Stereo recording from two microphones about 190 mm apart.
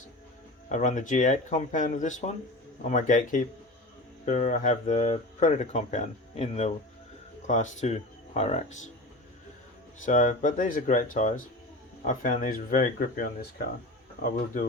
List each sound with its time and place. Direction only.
0.7 s speech: 40° left (ahead or behind)
10.1 s speech: 40° left (ahead or behind)